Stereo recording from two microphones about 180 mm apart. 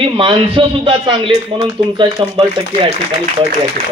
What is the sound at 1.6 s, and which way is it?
Speech, 20° right (ahead or behind).